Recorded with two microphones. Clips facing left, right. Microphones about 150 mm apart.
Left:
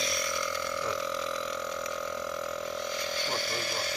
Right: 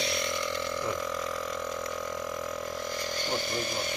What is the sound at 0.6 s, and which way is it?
Burping, 15° right (ahead or behind).